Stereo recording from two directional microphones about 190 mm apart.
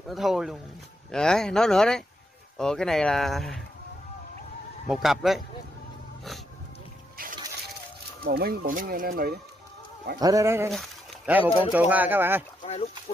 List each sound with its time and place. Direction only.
0.1 s speech: centre (ahead or behind)
4.8 s speech: centre (ahead or behind)
8.2 s speech: 55° right (ahead or behind)
10.2 s speech: 15° right (ahead or behind)
10.7 s speech: 5° right (ahead or behind)